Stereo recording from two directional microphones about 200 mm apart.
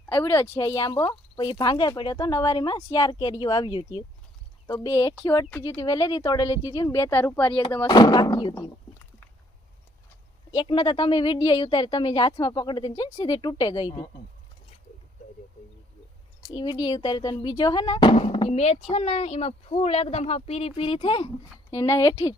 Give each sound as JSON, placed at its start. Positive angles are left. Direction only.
{"t": 0.2, "sound": "speech", "side_deg": 15}
{"t": 10.5, "sound": "speech", "side_deg": 25}
{"t": 16.5, "sound": "speech", "side_deg": 20}